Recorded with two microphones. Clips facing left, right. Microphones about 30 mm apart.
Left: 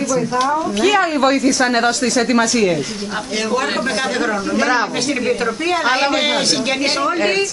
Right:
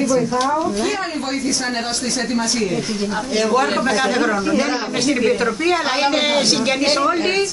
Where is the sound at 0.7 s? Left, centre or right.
Left.